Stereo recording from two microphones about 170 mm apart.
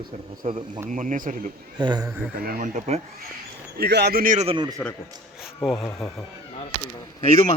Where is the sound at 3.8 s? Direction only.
75° right (ahead or behind); by 4.5 s 50° right (ahead or behind).